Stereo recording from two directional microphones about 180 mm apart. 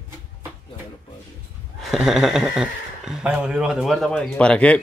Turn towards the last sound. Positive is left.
turn(degrees=5)  # may be behind; listen again after turning